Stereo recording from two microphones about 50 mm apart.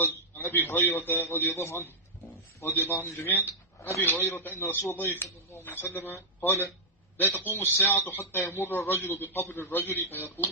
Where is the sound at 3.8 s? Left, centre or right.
Left.